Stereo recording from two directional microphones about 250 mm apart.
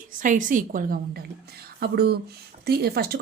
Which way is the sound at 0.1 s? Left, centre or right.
Right.